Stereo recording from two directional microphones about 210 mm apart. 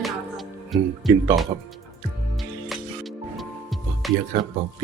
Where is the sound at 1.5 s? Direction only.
25° right (ahead or behind).